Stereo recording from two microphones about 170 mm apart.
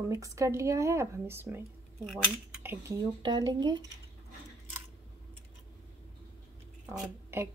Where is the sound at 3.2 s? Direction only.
25° right (ahead or behind).